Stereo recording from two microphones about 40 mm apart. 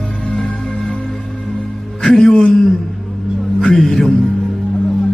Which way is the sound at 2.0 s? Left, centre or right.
Centre.